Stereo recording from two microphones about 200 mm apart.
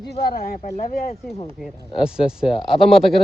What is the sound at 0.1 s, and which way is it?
Speech, 50° left (ahead or behind).